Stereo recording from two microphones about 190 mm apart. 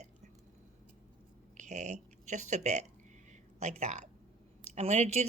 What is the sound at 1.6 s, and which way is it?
Speech, 40° right (ahead or behind).